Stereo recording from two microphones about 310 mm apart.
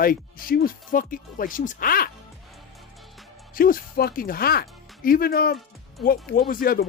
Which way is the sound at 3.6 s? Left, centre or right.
Left.